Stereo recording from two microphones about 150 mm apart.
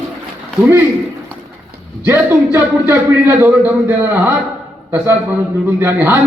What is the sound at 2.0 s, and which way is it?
A man's voice, 15° right (ahead or behind).